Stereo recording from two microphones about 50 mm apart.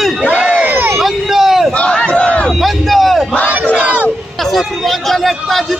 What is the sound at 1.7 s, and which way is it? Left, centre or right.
Speech, left.